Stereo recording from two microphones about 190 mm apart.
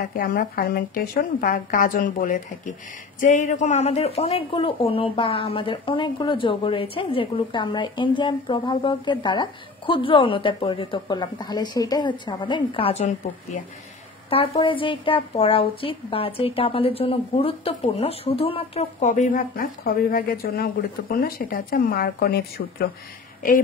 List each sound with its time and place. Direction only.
0.1 s a woman's voice: 50° left (ahead or behind)